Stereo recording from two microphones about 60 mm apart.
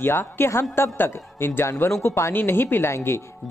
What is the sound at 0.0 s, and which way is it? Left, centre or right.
Speech, left.